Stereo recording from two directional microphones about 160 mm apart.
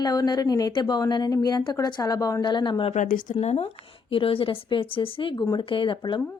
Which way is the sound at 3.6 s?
35° left (ahead or behind).